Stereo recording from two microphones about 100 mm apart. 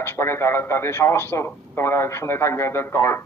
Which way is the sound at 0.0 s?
25° left (ahead or behind).